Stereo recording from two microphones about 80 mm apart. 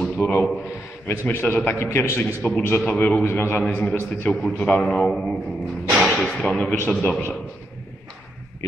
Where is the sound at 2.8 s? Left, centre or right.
Centre.